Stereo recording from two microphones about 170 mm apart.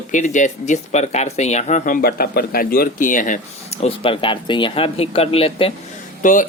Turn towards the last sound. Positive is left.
turn(degrees=50)  # may be behind; listen again after turning